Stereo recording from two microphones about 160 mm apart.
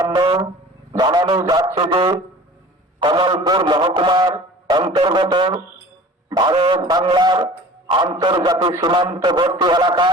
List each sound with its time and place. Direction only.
0.1 s speech: 25° right (ahead or behind)